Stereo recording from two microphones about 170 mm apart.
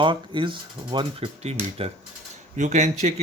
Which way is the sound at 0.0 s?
30° right (ahead or behind).